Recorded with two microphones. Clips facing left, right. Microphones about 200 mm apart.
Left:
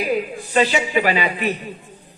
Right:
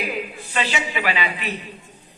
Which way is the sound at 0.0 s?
40° left (ahead or behind).